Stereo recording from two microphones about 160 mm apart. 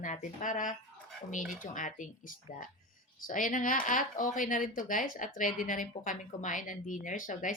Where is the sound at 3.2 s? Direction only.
55° left (ahead or behind).